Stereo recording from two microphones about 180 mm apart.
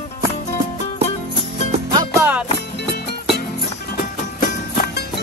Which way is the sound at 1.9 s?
15° right (ahead or behind).